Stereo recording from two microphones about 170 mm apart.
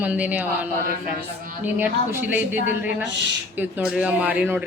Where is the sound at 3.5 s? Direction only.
10° right (ahead or behind).